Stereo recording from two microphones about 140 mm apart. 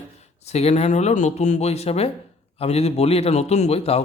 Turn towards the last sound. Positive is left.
turn(degrees=45)  # may be behind; listen again after turning